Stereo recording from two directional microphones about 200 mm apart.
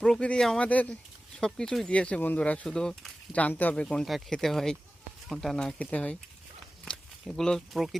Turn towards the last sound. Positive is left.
turn(degrees=0)  # may be behind; listen again after turning